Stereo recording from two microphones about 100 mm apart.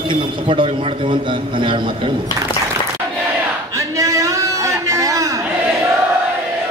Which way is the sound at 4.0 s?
35° right (ahead or behind).